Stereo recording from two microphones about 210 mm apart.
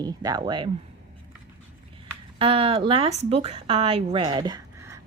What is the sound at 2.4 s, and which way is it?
A child's voice, 25° right (ahead or behind).